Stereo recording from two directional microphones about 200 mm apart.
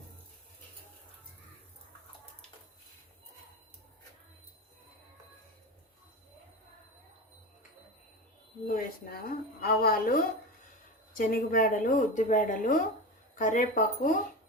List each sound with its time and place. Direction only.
8.6 s a woman's voice: 45° left (ahead or behind)